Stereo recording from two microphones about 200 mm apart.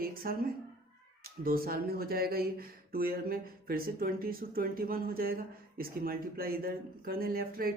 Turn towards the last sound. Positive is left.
turn(degrees=-45)  # may be behind; listen again after turning